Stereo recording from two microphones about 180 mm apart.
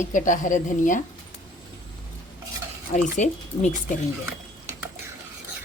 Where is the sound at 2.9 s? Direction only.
45° left (ahead or behind).